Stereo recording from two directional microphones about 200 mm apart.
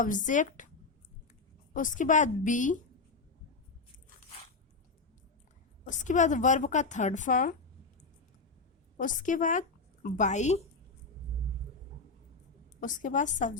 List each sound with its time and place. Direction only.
0.0 s a woman's voice: 40° left (ahead or behind)
1.7 s a woman's voice: 40° left (ahead or behind)
5.8 s a woman's voice: 40° left (ahead or behind)
9.0 s a woman's voice: 40° left (ahead or behind)
12.8 s a woman's voice: 40° left (ahead or behind)